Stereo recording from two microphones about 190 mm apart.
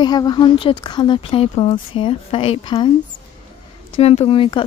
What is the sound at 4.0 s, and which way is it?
Speech, 30° left (ahead or behind).